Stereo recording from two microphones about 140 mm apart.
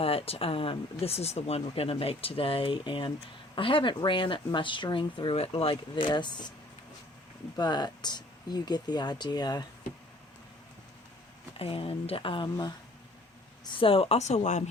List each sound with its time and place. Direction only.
0.0 s speech: 45° left (ahead or behind)
7.5 s speech: 30° left (ahead or behind)
11.5 s speech: 40° left (ahead or behind)
13.7 s speech: 40° left (ahead or behind)